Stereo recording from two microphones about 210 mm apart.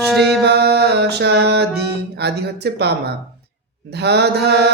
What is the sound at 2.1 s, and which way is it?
Mantra, 50° right (ahead or behind).